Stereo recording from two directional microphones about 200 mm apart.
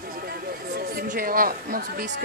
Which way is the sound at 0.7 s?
45° right (ahead or behind).